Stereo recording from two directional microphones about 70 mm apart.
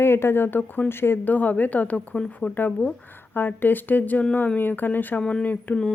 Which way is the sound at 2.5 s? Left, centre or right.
Left.